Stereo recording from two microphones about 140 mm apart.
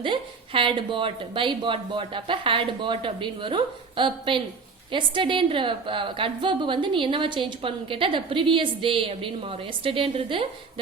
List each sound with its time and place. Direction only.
0.0 s a woman's voice: 35° right (ahead or behind)